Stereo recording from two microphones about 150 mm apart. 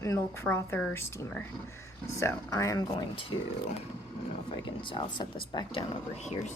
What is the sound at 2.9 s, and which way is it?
Speech, 35° left (ahead or behind).